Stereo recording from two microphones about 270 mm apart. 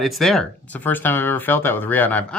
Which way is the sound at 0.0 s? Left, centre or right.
Centre.